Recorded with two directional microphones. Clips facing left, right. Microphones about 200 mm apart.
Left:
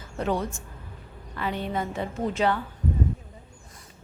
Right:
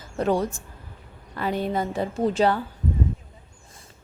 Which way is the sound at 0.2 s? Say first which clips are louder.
Right 4 dB; 40° right (ahead or behind).